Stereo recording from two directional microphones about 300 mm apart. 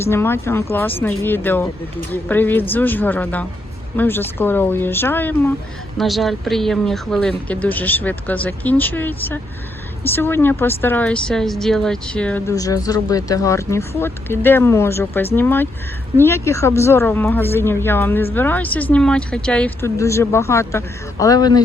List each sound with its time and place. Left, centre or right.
0.0 s speech: centre